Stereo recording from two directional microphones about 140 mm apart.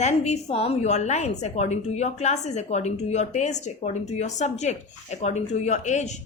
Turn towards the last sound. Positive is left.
turn(degrees=55)  # may be behind; listen again after turning